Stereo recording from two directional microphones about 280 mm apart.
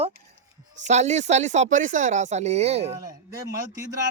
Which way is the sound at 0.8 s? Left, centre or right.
Right.